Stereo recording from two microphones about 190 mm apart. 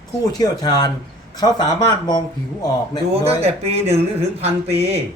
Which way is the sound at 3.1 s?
30° right (ahead or behind).